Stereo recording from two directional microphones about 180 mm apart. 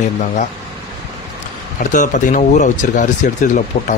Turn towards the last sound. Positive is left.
turn(degrees=45)  # may be behind; listen again after turning